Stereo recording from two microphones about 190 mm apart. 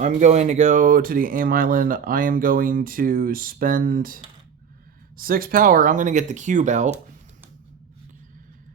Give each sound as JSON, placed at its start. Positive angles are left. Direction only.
{"t": 0.0, "sound": "speech", "side_deg": -40}